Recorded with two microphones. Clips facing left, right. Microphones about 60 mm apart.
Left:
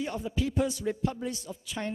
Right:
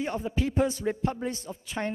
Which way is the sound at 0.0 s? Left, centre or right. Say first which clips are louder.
Right 2 dB; right.